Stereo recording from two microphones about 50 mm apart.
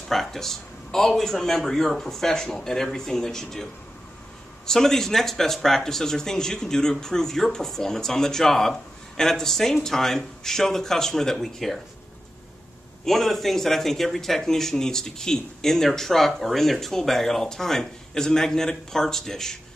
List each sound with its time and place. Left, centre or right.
0.1 s a man's voice: centre
4.6 s a man's voice: centre
13.0 s a man's voice: centre